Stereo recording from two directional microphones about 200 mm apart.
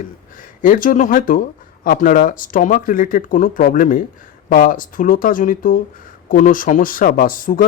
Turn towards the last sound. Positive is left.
turn(degrees=45)  # may be behind; listen again after turning